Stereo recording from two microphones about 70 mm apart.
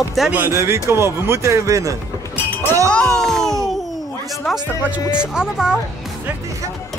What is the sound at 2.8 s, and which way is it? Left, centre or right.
Music, centre.